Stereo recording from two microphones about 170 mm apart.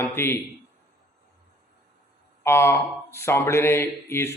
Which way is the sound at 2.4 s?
15° left (ahead or behind).